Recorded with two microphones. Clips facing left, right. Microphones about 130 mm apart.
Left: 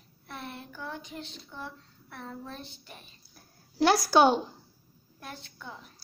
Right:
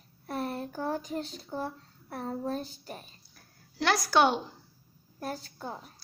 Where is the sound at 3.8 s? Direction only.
5° left (ahead or behind).